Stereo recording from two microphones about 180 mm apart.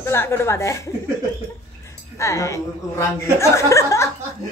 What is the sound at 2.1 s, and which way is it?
A woman's voice, 15° left (ahead or behind).